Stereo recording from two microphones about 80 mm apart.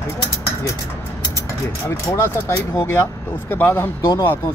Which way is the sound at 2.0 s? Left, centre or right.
Left.